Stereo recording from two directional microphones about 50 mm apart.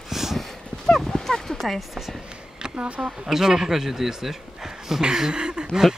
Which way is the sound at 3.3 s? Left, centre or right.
Centre.